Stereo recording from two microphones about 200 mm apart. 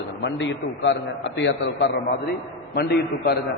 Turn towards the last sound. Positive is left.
turn(degrees=55)  # may be behind; listen again after turning